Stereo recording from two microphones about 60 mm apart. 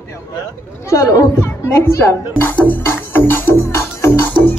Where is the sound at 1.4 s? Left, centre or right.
Left.